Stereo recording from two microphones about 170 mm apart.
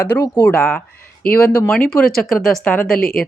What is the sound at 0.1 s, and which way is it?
Speech, 20° left (ahead or behind).